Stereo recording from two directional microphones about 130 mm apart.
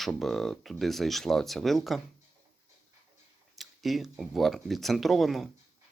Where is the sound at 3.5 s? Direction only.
Centre (ahead or behind).